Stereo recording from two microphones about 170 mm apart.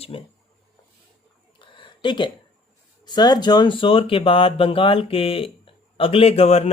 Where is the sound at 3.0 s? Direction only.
25° left (ahead or behind).